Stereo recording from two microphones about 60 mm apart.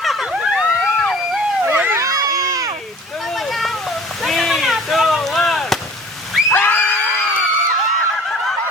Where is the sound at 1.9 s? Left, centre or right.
Right.